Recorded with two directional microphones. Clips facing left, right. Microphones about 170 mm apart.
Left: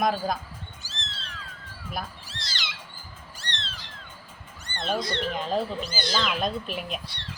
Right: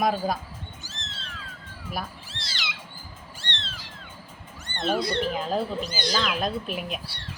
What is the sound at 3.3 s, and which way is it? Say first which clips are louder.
Cat: even; 40° left (ahead or behind).